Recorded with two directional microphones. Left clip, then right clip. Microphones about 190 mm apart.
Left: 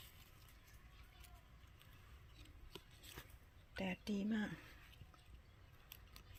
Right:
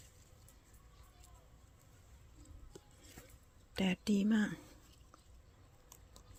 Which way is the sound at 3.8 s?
75° right (ahead or behind).